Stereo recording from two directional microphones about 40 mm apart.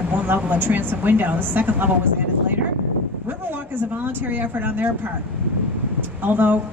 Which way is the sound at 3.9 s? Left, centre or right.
Right.